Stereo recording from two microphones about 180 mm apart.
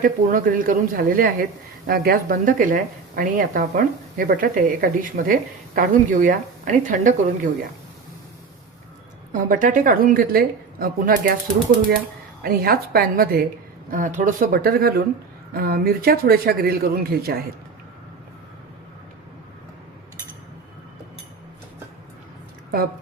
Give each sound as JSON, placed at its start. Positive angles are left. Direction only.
{"t": 0.0, "sound": "a woman's voice", "side_deg": -50}
{"t": 9.3, "sound": "a woman's voice", "side_deg": -45}
{"t": 12.4, "sound": "a woman's voice", "side_deg": -55}